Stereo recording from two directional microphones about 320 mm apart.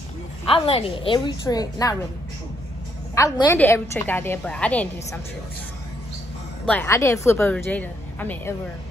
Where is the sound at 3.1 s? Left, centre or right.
Centre.